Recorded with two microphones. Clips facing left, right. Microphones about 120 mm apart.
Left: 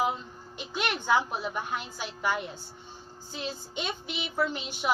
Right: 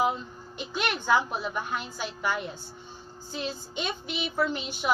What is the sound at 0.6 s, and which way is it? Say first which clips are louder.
A woman's voice: right 1 dB; 15° left (ahead or behind).